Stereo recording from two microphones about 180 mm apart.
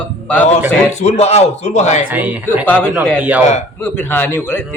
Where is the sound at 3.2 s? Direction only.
10° right (ahead or behind).